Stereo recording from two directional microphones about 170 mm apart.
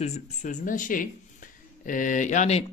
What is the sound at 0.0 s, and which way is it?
Speech, 45° left (ahead or behind).